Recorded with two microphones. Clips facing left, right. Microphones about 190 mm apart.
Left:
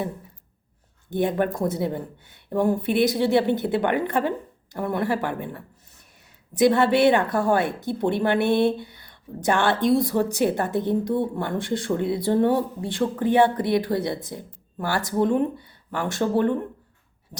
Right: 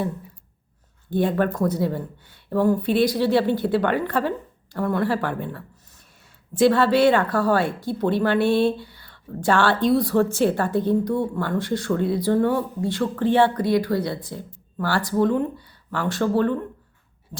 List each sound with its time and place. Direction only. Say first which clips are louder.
1.1 s speech: right 2 dB; 20° left (ahead or behind)